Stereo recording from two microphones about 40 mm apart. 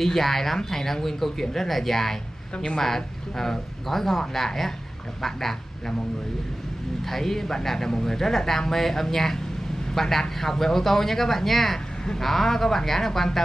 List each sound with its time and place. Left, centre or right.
0.0 s speech: centre
2.5 s speech: left
2.8 s speech: centre
7.1 s speech: centre